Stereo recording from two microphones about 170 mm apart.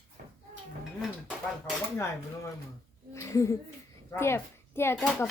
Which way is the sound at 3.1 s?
15° left (ahead or behind).